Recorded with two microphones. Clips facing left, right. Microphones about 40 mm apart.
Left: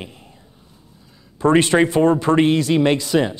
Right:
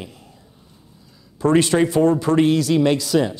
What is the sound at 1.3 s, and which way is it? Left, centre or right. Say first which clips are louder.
A man's voice: left 2 dB; left.